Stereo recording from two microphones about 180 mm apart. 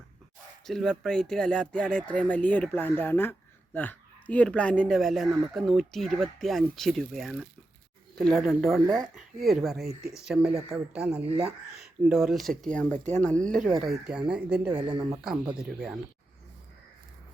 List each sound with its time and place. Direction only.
0.7 s speech: 5° left (ahead or behind)
14.8 s speech: 25° right (ahead or behind)
15.5 s speech: 5° right (ahead or behind)